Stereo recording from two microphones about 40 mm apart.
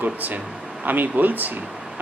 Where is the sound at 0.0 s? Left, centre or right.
Right.